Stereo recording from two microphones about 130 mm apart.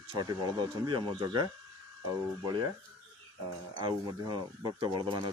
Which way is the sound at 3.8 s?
35° right (ahead or behind).